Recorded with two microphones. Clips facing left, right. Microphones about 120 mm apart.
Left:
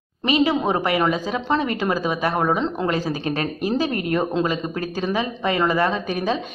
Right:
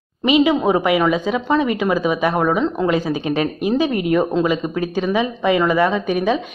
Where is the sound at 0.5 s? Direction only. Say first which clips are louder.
Right 5 dB; 15° right (ahead or behind).